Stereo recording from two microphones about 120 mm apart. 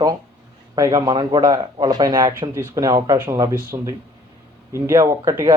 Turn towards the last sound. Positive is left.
turn(degrees=-25)  # may be behind; listen again after turning